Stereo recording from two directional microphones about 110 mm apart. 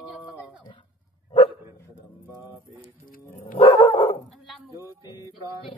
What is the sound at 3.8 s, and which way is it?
Dog, 30° left (ahead or behind).